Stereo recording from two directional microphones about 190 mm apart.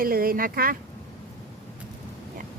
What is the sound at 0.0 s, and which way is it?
Speech, 50° right (ahead or behind).